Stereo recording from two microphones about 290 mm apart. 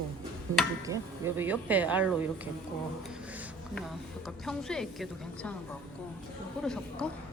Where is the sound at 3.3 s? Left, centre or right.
Centre.